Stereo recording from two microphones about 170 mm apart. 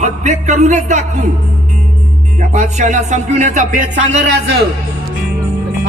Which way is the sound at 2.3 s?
45° right (ahead or behind).